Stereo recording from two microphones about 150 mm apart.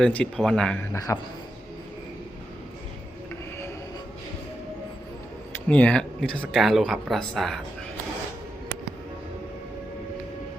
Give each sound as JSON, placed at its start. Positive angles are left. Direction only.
{"t": 0.0, "sound": "speech", "side_deg": 5}
{"t": 0.9, "sound": "a man's voice", "side_deg": 25}
{"t": 5.6, "sound": "speech", "side_deg": 10}